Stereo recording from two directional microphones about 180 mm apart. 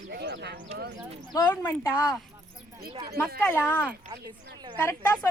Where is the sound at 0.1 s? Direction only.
70° right (ahead or behind).